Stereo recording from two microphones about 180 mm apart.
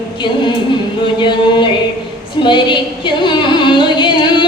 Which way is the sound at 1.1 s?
25° left (ahead or behind).